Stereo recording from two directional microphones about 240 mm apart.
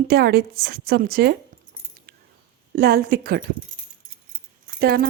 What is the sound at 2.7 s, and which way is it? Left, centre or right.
Speech, right.